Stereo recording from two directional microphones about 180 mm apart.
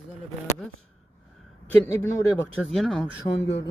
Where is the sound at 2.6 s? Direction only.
Centre (ahead or behind).